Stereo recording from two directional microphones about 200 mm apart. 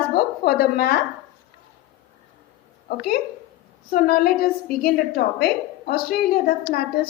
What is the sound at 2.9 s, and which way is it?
A woman's voice, 50° left (ahead or behind).